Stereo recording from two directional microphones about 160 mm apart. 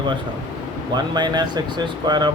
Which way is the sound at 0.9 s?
25° right (ahead or behind).